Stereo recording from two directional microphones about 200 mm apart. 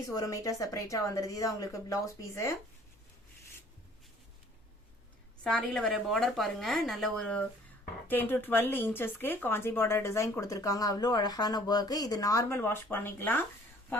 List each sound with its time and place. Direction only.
0.1 s speech: 15° left (ahead or behind)
5.4 s a woman's voice: 5° left (ahead or behind)